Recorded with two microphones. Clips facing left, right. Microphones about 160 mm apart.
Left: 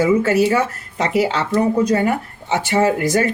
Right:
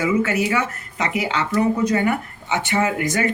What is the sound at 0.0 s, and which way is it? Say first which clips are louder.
Speech: left 5 dB; 35° left (ahead or behind).